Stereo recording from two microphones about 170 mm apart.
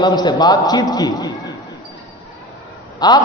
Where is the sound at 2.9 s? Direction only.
25° left (ahead or behind).